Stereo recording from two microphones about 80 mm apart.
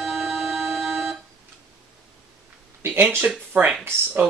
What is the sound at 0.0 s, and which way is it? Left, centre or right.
Music, centre.